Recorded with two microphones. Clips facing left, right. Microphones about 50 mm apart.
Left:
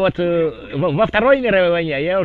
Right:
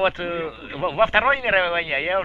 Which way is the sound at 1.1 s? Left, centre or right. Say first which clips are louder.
Left 5 dB; centre.